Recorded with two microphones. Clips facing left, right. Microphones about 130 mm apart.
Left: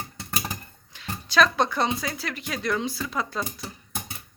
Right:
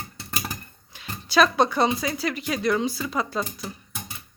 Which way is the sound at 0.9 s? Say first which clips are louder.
Right 2 dB; 10° right (ahead or behind).